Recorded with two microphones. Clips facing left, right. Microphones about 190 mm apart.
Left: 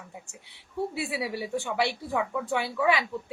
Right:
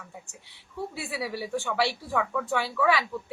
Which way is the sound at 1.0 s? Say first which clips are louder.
Left 2 dB; 60° left (ahead or behind).